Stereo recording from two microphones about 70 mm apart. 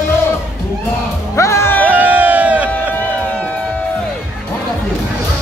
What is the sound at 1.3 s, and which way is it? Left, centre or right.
Music, left.